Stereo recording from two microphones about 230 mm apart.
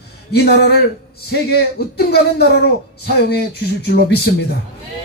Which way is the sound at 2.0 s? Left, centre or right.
Left.